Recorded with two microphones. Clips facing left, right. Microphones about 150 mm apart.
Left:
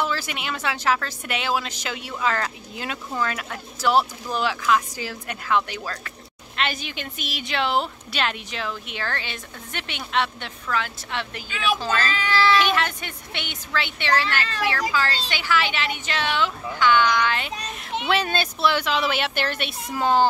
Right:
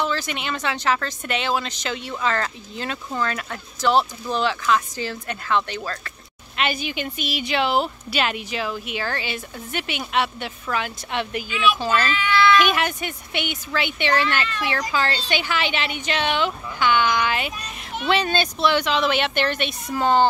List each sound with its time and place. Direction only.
0.0 s a woman's voice: 5° left (ahead or behind)
6.5 s a woman's voice: 5° right (ahead or behind)
12.1 s speech: 35° left (ahead or behind)
12.6 s a woman's voice: 15° right (ahead or behind)
18.0 s speech: centre (ahead or behind)